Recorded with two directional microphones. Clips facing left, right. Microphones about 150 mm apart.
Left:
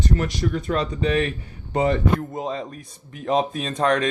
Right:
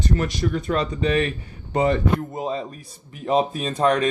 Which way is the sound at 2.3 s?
5° right (ahead or behind).